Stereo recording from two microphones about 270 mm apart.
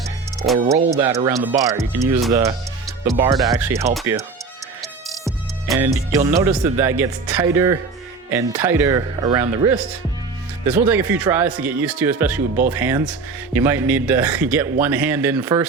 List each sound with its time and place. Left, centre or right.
0.6 s speech: right
0.9 s speech: centre
4.8 s music: centre
6.1 s speech: centre